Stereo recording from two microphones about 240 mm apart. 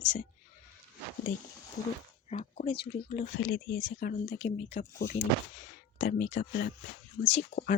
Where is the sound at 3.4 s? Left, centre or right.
Left.